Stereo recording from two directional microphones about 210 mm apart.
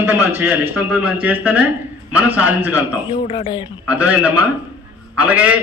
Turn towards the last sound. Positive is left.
turn(degrees=-5)  # may be behind; listen again after turning